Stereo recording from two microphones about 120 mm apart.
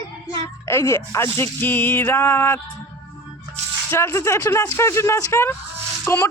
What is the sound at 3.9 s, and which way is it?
Speech, 20° left (ahead or behind).